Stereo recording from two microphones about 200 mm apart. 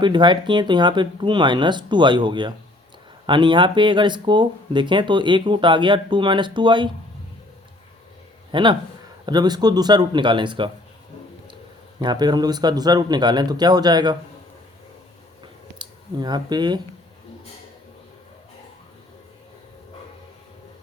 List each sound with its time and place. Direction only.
0.0 s speech: 25° right (ahead or behind)
8.5 s speech: 25° right (ahead or behind)
11.9 s speech: 20° right (ahead or behind)
15.8 s speech: 20° right (ahead or behind)